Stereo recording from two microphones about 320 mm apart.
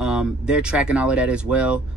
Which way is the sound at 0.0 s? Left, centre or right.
Centre.